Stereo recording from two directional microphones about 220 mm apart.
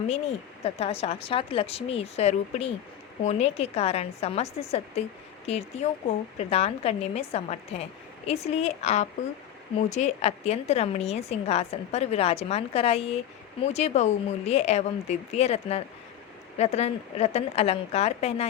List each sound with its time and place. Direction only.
0.1 s a woman's voice: 30° left (ahead or behind)